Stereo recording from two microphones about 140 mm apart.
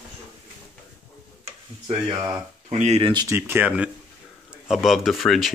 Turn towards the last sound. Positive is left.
turn(degrees=0)  # may be behind; listen again after turning